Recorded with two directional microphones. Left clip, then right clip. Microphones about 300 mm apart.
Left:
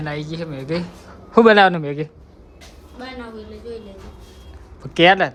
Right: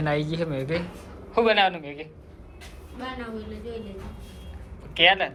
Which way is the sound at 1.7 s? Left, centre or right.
Left.